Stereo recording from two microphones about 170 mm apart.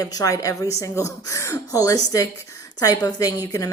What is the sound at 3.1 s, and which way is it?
Speech, 20° left (ahead or behind).